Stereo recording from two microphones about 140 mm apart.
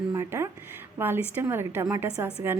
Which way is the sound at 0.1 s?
20° right (ahead or behind).